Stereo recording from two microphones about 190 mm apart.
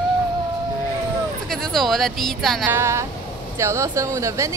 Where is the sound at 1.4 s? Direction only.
Centre (ahead or behind).